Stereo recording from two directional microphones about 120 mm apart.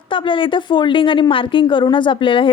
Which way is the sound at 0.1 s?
45° left (ahead or behind).